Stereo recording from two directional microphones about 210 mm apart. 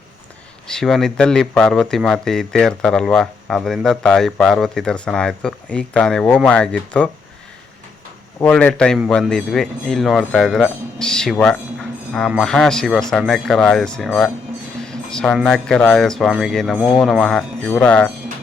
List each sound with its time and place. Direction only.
0.7 s speech: centre (ahead or behind)
8.4 s speech: 5° left (ahead or behind)